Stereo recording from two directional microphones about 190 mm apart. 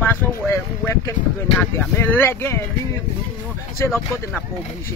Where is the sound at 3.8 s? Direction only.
15° left (ahead or behind).